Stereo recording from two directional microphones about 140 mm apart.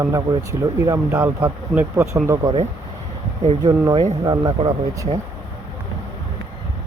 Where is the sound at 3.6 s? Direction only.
30° right (ahead or behind).